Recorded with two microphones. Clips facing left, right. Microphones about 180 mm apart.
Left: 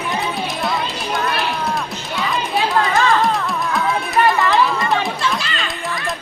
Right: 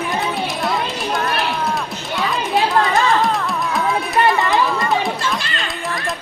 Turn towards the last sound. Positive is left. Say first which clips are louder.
# even
turn(degrees=0)  # may be behind; listen again after turning